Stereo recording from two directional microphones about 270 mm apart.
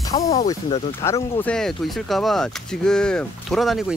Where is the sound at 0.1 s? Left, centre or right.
Left.